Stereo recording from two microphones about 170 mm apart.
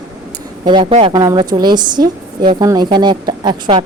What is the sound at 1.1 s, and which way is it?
Speech, 25° right (ahead or behind).